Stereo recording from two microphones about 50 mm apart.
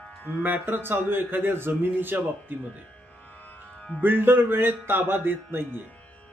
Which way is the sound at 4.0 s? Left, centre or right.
Right.